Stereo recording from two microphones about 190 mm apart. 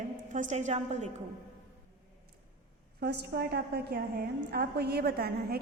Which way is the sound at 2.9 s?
60° right (ahead or behind).